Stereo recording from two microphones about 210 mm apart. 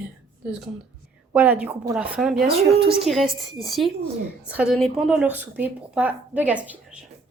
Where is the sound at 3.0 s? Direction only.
Centre (ahead or behind).